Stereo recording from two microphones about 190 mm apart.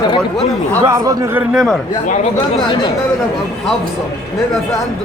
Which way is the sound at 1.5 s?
Centre (ahead or behind).